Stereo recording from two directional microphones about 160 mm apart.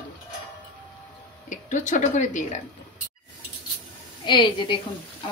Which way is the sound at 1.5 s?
50° left (ahead or behind).